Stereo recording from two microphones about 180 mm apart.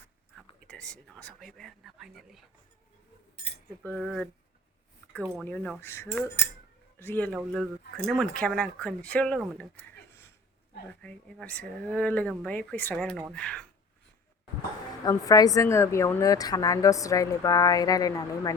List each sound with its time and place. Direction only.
0.7 s speech: 5° left (ahead or behind)
3.8 s speech: 5° left (ahead or behind)
5.5 s speech: 5° left (ahead or behind)
7.3 s speech: centre (ahead or behind)
15.0 s a woman's voice: 20° left (ahead or behind)